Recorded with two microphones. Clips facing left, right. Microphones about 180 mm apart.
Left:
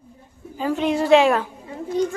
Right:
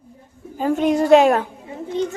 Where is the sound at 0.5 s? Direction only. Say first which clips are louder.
Right 3 dB; 45° right (ahead or behind).